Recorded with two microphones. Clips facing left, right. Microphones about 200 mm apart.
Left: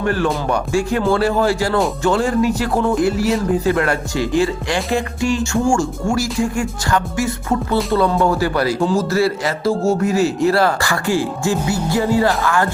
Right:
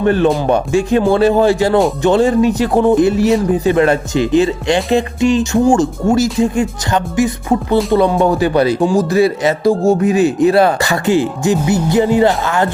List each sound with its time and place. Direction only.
0.0 s speech: 20° right (ahead or behind)